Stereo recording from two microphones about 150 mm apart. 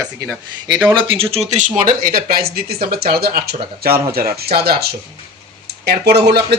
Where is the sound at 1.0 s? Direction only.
35° right (ahead or behind).